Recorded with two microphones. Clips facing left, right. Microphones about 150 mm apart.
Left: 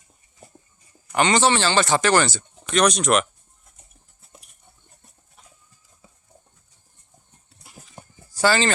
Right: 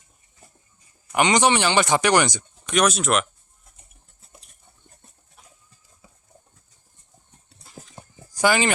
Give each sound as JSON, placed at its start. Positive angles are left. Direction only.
{"t": 1.1, "sound": "speech", "side_deg": -15}
{"t": 2.7, "sound": "speech", "side_deg": -5}
{"t": 8.3, "sound": "a sound", "side_deg": -15}